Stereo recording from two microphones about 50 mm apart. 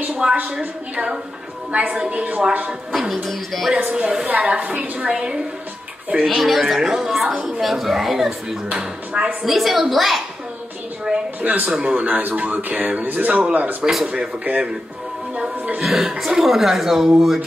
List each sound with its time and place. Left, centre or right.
0.1 s a sound: centre
0.4 s speech: right
2.9 s speech: centre
3.7 s speech: right
4.3 s speech: right
6.2 s speech: centre
11.1 s a sound: centre
11.4 s speech: right
15.3 s music: right
15.8 s speech: centre